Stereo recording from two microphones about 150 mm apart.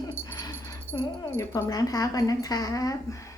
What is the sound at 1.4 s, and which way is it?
A woman's voice, 20° left (ahead or behind).